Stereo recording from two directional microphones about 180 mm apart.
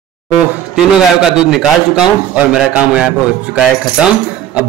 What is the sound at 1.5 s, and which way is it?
A man's voice, centre (ahead or behind).